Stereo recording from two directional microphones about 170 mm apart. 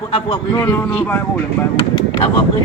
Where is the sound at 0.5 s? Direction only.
10° left (ahead or behind).